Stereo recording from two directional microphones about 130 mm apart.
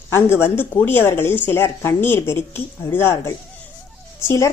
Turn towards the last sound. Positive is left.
turn(degrees=20)  # may be behind; listen again after turning